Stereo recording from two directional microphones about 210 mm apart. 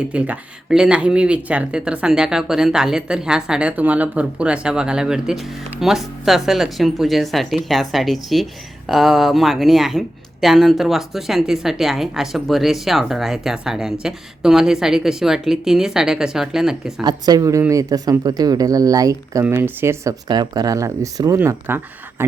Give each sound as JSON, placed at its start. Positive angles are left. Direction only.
{"t": 0.1, "sound": "speech", "side_deg": -5}
{"t": 17.0, "sound": "speech", "side_deg": -20}